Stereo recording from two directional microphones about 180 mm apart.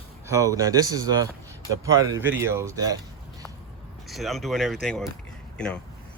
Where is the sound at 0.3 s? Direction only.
15° right (ahead or behind).